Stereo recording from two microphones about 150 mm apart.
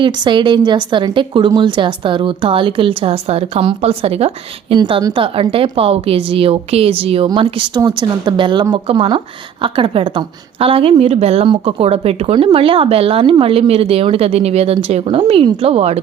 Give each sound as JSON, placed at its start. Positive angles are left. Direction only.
{"t": 0.0, "sound": "speech", "side_deg": -30}
{"t": 7.3, "sound": "speech", "side_deg": -25}